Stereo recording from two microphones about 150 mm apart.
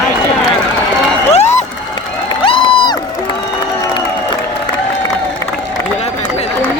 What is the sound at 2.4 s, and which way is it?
Crowd, 35° left (ahead or behind).